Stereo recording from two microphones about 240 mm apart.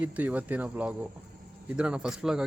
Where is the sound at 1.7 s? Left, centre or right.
Centre.